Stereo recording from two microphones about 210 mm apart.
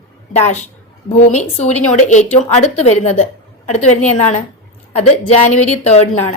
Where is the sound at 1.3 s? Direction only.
35° left (ahead or behind).